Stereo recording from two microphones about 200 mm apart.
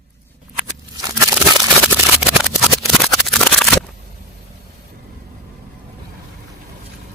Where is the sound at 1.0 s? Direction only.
20° right (ahead or behind).